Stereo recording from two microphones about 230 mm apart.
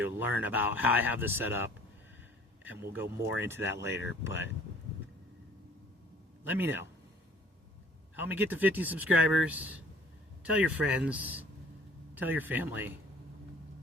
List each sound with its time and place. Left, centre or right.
0.0 s speech: centre
4.3 s speech: left
6.4 s speech: centre
8.3 s speech: centre